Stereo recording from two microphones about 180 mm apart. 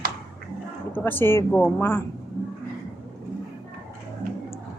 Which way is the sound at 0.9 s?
10° left (ahead or behind).